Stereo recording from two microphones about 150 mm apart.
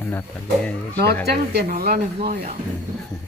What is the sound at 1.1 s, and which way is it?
Speech, 90° right.